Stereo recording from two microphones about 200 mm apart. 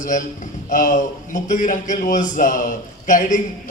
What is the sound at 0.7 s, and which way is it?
A man's voice, 40° left (ahead or behind).